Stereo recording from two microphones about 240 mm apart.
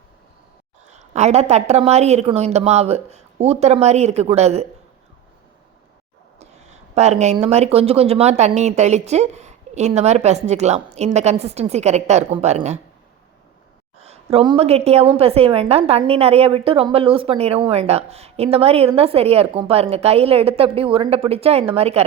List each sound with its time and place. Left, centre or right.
0.9 s speech: right
6.4 s speech: right
14.0 s speech: right